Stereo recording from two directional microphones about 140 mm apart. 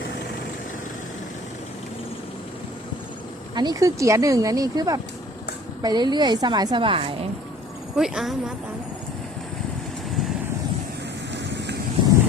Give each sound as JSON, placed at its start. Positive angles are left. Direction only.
{"t": 3.5, "sound": "a woman's voice", "side_deg": -30}
{"t": 7.9, "sound": "speech", "side_deg": -5}